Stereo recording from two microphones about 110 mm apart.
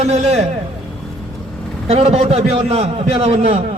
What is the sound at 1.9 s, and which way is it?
A man's voice, 70° right (ahead or behind).